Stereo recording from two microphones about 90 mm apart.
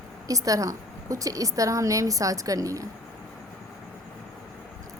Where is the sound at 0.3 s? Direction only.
40° right (ahead or behind).